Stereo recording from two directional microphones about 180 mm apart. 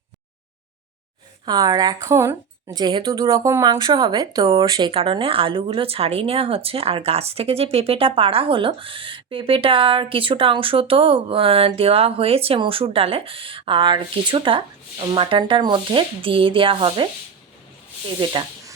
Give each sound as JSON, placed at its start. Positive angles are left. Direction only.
{"t": 1.5, "sound": "speech", "side_deg": -20}
{"t": 18.2, "sound": "speech", "side_deg": -25}